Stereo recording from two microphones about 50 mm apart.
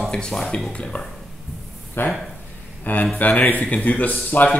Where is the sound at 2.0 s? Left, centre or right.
Left.